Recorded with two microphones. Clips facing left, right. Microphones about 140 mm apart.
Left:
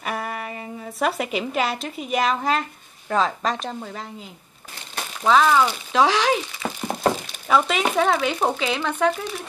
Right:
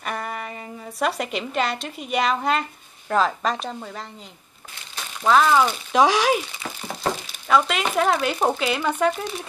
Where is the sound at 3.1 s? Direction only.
Centre (ahead or behind).